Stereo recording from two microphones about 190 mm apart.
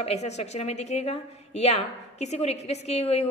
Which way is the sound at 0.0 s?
35° left (ahead or behind).